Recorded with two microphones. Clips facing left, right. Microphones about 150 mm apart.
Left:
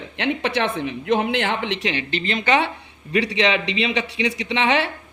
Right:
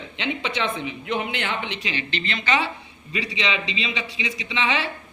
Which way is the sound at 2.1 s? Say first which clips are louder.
Left 4 dB; 45° left (ahead or behind).